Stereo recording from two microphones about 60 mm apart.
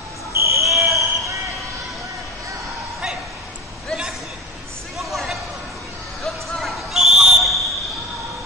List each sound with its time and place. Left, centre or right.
0.4 s fire alarm: right
0.7 s basketball bounce: right
4.9 s a sound: centre
6.2 s basketball bounce: centre